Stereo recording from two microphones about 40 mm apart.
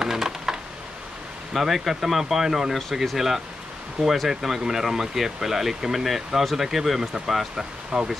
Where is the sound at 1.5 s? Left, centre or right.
Centre.